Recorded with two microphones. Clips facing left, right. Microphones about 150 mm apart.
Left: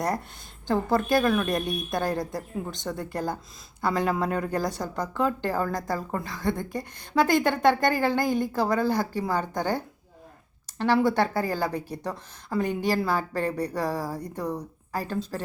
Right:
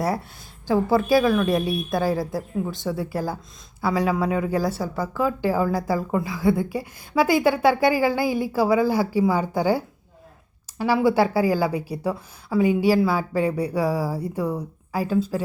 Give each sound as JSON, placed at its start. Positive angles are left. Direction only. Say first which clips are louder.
{"t": 0.7, "sound": "a woman's voice", "louder": "right 4 dB", "side_deg": -5}